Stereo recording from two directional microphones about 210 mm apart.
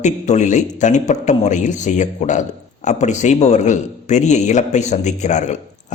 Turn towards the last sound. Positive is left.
turn(degrees=35)  # may be behind; listen again after turning